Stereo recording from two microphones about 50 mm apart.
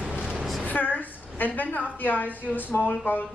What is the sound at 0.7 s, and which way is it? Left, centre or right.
A woman's voice, left.